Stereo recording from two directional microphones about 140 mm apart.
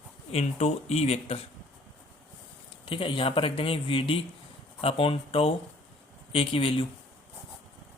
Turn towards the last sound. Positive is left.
turn(degrees=40)  # may be behind; listen again after turning